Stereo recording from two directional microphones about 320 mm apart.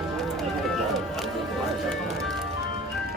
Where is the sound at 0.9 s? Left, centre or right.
Centre.